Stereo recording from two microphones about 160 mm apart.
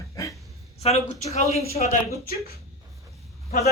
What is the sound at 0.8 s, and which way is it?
Speech, 40° left (ahead or behind).